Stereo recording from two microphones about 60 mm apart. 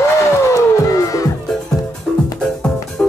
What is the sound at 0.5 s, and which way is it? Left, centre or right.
Music, left.